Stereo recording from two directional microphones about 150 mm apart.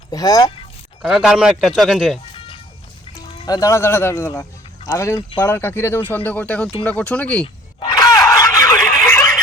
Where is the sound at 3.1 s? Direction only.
25° left (ahead or behind); by 7.4 s 10° left (ahead or behind).